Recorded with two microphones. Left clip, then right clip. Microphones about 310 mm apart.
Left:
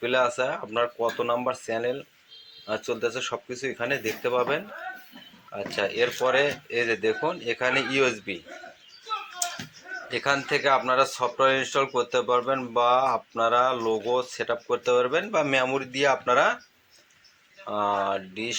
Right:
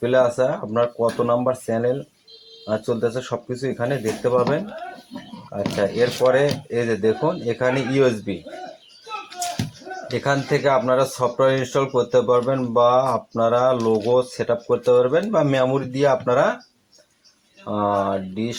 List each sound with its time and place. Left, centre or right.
0.0 s speech: right
10.2 s speech: right
17.7 s speech: right